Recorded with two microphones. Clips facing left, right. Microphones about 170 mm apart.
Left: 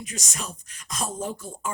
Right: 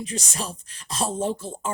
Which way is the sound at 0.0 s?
30° right (ahead or behind).